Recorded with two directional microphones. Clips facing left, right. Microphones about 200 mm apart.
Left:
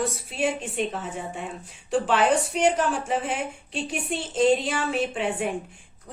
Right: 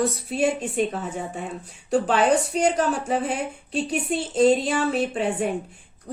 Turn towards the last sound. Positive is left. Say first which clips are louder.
# right 3 dB
turn(degrees=-40)  # may be behind; listen again after turning